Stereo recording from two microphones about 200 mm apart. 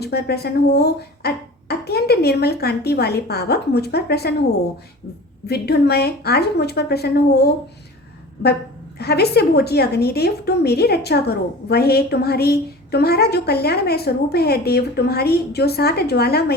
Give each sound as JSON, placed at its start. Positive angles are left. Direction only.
{"t": 0.0, "sound": "a woman's voice", "side_deg": 55}
{"t": 5.5, "sound": "a woman's voice", "side_deg": 55}
{"t": 9.0, "sound": "a woman's voice", "side_deg": 55}